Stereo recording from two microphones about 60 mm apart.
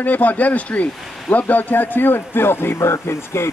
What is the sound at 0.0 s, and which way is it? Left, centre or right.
Speech, left.